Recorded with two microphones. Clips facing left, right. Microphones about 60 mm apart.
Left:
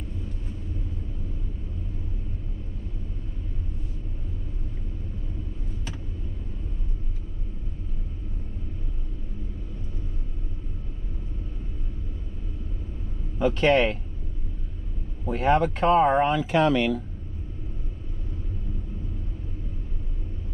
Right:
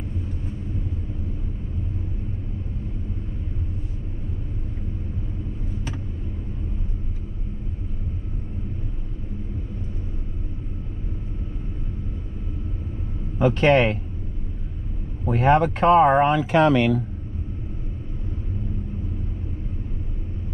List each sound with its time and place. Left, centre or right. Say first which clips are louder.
13.4 s speech: right 3 dB; right
15.2 s speech: right 4 dB; right